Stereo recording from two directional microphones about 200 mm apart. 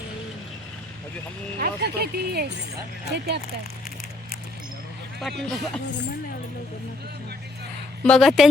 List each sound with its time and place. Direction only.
1.5 s speech: 50° right (ahead or behind)
5.4 s a woman's voice: centre (ahead or behind)
8.0 s a woman's voice: 5° left (ahead or behind)